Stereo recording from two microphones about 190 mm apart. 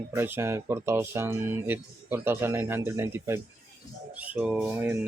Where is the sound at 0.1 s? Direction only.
10° right (ahead or behind).